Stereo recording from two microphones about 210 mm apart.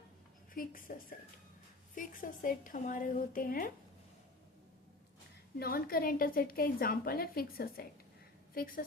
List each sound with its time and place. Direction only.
0.5 s a woman's voice: 40° left (ahead or behind)
2.0 s a woman's voice: 40° left (ahead or behind)
5.5 s a woman's voice: 45° left (ahead or behind)